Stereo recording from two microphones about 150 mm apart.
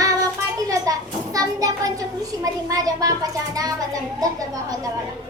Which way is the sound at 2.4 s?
25° right (ahead or behind).